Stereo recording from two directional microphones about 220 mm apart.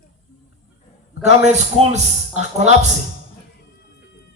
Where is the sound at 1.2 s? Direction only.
30° right (ahead or behind).